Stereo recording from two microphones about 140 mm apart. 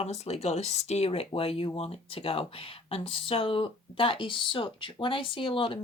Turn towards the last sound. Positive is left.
turn(degrees=40)  # may be behind; listen again after turning